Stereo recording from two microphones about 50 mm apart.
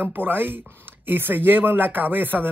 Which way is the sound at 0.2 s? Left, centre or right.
Right.